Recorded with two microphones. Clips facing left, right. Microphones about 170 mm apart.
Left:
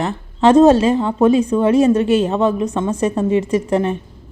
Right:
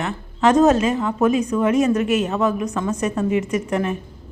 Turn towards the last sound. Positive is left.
turn(degrees=30)  # may be behind; listen again after turning